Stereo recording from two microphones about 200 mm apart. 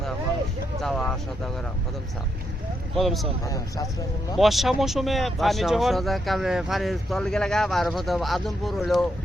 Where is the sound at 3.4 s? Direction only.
15° left (ahead or behind).